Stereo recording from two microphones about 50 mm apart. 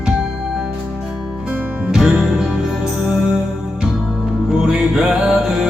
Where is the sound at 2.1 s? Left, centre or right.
Centre.